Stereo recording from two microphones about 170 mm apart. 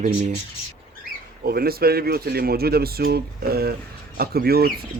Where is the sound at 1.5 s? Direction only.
65° right (ahead or behind).